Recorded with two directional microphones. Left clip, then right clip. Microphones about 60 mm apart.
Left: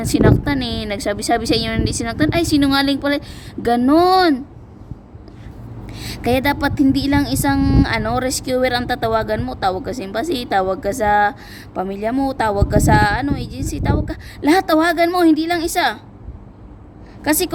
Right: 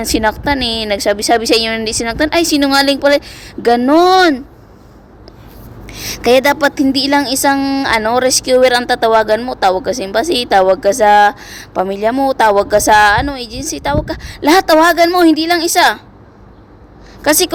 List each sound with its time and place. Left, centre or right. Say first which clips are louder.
0.0 s a woman's voice: right 2 dB; centre
3.2 s a woman's voice: right 6 dB; left
5.8 s a woman's voice: right 7 dB; centre
7.6 s a woman's voice: right 2 dB; left
7.9 s speech: right 8 dB; centre
17.2 s speech: right 6 dB; centre